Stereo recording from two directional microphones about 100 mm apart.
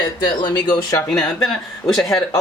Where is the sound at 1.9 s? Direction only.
5° left (ahead or behind).